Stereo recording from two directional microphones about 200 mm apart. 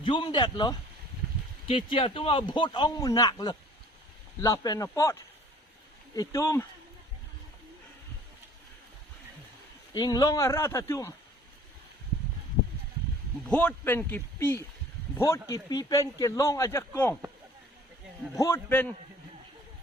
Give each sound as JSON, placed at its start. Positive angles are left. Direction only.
{"t": 0.0, "sound": "speech", "side_deg": 25}
{"t": 6.1, "sound": "speech", "side_deg": 15}
{"t": 9.9, "sound": "speech", "side_deg": 20}
{"t": 13.5, "sound": "speech", "side_deg": 5}
{"t": 18.3, "sound": "speech", "side_deg": 15}